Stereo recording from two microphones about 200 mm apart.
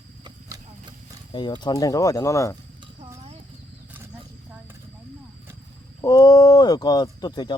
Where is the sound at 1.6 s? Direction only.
20° left (ahead or behind).